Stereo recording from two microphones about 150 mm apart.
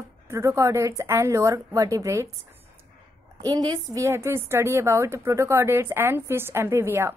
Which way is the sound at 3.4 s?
25° right (ahead or behind).